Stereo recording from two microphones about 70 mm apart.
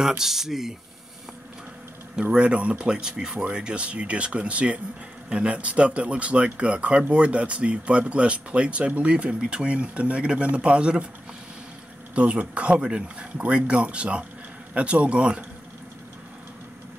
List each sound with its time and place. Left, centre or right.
0.2 s speech: centre
2.1 s speech: centre
12.2 s speech: centre